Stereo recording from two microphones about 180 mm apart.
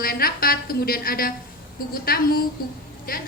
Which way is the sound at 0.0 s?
55° left (ahead or behind).